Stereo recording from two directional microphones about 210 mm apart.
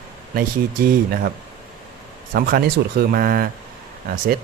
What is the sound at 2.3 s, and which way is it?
Speech, 45° right (ahead or behind).